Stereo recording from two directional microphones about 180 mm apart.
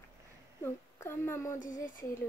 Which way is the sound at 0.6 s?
15° left (ahead or behind).